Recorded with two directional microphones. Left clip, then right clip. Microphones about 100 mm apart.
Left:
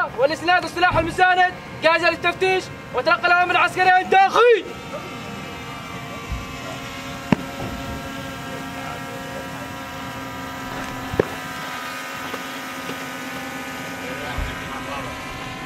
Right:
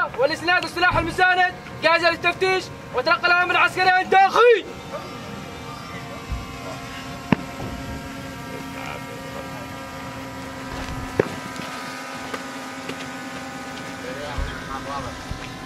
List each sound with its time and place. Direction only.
0.2 s a man's voice: 15° left (ahead or behind)
7.3 s music: 25° left (ahead or behind)
11.2 s a sound: 5° left (ahead or behind)